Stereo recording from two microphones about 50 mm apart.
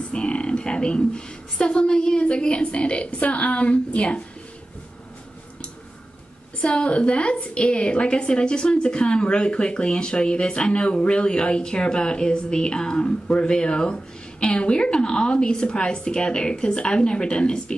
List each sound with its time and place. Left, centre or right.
0.1 s a woman's voice: left
6.6 s a woman's voice: left